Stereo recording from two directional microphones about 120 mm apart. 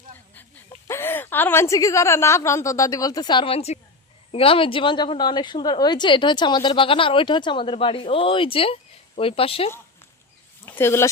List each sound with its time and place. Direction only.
0.9 s a woman's voice: 20° left (ahead or behind); by 9.7 s 50° left (ahead or behind)
10.7 s speech: 20° left (ahead or behind)